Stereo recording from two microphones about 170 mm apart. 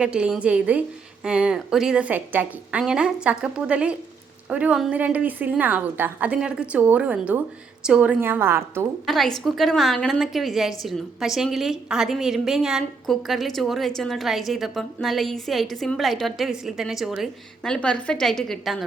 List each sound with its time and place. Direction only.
0.0 s a woman's voice: 5° right (ahead or behind)
9.0 s a woman's voice: centre (ahead or behind)